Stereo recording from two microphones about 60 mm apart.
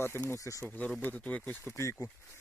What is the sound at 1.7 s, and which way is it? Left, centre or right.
Speech, left.